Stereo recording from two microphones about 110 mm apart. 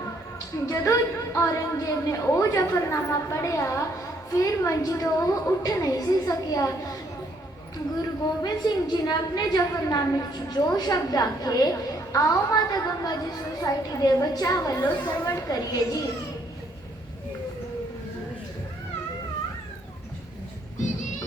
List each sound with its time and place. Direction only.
0.3 s a woman's voice: 30° left (ahead or behind)
8.4 s a woman's voice: 35° left (ahead or behind)